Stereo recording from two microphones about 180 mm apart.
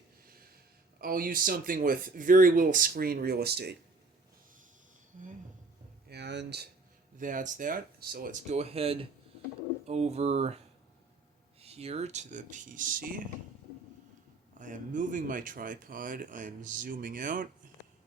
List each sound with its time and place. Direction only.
1.0 s speech: 50° right (ahead or behind)
5.1 s a sound: 45° right (ahead or behind)
6.1 s a sound: 70° right (ahead or behind)
7.2 s speech: 45° right (ahead or behind)
8.4 s speech: 35° right (ahead or behind)
11.6 s speech: 35° right (ahead or behind); by 13.2 s 50° right (ahead or behind)
14.6 s speech: 45° right (ahead or behind)